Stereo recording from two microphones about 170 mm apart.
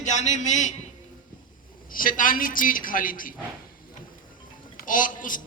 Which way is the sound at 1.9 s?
55° left (ahead or behind).